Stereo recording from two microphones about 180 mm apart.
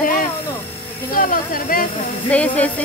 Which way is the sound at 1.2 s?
50° left (ahead or behind).